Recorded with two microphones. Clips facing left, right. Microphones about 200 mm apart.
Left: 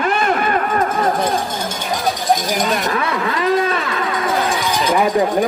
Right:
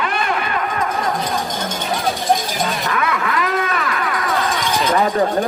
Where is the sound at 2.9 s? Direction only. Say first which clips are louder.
Left 1 dB; 30° left (ahead or behind).